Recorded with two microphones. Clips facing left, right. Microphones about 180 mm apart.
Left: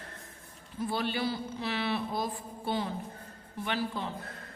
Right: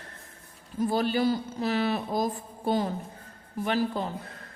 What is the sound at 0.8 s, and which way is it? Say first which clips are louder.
A man's voice: right 7 dB; 40° right (ahead or behind).